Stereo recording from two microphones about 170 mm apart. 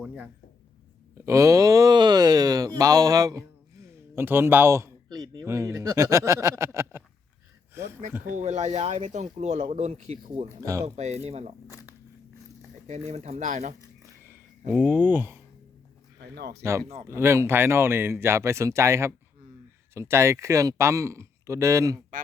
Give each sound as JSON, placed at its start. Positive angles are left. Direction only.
{"t": 0.0, "sound": "speech", "side_deg": -5}
{"t": 1.2, "sound": "speech", "side_deg": -15}
{"t": 8.2, "sound": "speech", "side_deg": -45}
{"t": 11.7, "sound": "speech", "side_deg": 20}
{"t": 12.9, "sound": "speech", "side_deg": -40}
{"t": 14.7, "sound": "speech", "side_deg": -5}
{"t": 16.2, "sound": "speech", "side_deg": -70}
{"t": 17.1, "sound": "speech", "side_deg": -15}